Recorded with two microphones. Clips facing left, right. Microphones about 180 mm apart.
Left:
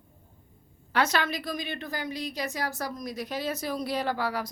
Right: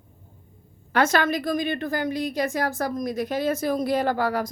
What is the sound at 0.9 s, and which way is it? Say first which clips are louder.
A woman's voice: right 6 dB; 50° right (ahead or behind).